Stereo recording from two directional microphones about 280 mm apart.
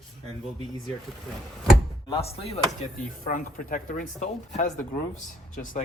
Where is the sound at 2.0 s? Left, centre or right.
Centre.